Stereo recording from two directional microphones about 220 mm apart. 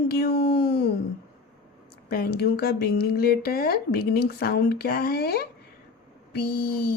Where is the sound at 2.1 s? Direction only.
45° left (ahead or behind).